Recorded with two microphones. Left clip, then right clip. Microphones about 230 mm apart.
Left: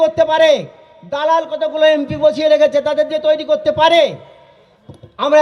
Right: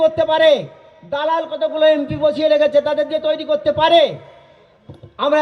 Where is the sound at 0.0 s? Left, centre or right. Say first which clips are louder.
Left 2 dB; left.